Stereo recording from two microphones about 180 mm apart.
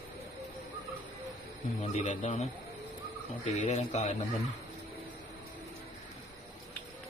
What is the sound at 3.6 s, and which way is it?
Speech, 40° left (ahead or behind).